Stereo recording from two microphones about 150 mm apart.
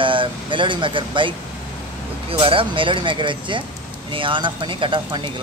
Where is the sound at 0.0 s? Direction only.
35° right (ahead or behind).